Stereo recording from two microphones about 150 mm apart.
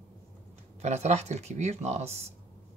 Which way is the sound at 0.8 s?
45° right (ahead or behind).